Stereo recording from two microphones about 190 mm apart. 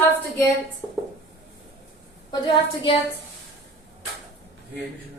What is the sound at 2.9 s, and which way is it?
Speech, 30° left (ahead or behind).